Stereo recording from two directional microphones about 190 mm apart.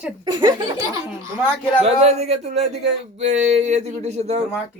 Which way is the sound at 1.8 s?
35° right (ahead or behind).